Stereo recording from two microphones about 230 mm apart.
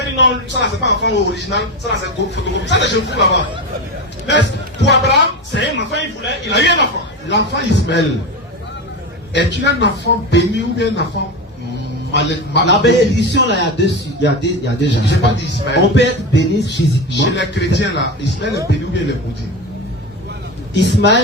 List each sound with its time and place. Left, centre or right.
0.0 s speech: left
4.3 s speech: left
9.3 s speech: left
12.1 s speech: left
20.7 s speech: left